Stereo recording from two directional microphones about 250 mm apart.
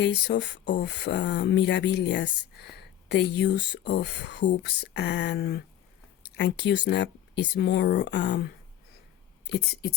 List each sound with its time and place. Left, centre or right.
0.0 s speech: left